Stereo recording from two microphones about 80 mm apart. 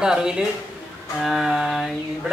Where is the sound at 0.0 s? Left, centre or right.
Centre.